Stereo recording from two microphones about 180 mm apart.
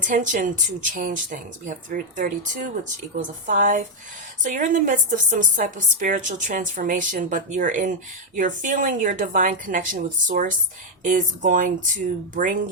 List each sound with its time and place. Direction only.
0.0 s a woman's voice: 45° right (ahead or behind)